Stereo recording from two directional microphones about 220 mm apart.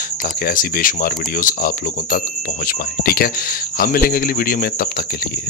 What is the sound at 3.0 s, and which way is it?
Speech, 45° left (ahead or behind).